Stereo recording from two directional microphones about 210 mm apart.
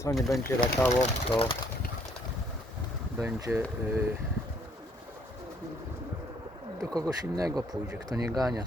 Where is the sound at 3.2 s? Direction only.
15° right (ahead or behind).